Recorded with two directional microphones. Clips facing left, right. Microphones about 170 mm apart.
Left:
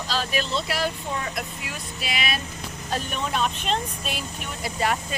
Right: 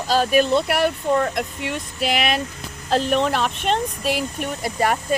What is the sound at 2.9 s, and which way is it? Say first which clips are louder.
Speech: right 9 dB; 90° right.